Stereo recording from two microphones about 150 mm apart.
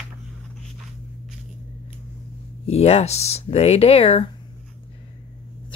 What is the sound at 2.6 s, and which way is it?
Speech, 45° left (ahead or behind).